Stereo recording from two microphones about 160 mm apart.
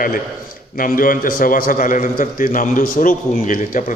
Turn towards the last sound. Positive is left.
turn(degrees=55)  # may be behind; listen again after turning